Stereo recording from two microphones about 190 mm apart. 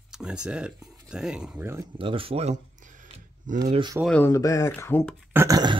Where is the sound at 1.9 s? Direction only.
25° right (ahead or behind).